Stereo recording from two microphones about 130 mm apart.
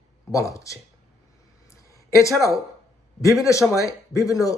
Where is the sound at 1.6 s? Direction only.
25° left (ahead or behind).